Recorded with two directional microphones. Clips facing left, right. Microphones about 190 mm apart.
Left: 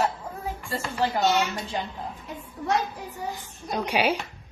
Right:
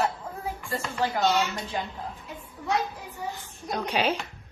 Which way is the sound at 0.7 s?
30° left (ahead or behind).